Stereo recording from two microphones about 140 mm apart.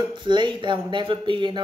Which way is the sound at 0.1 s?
35° right (ahead or behind).